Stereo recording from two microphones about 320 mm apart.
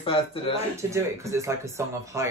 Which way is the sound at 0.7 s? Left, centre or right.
Centre.